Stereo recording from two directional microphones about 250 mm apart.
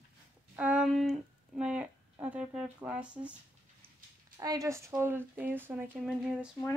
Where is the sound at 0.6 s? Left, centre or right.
Centre.